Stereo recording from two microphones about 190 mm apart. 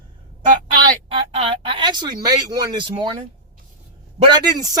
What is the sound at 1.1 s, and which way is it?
Speech, 30° right (ahead or behind).